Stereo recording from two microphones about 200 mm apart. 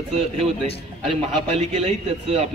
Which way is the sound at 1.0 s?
35° right (ahead or behind).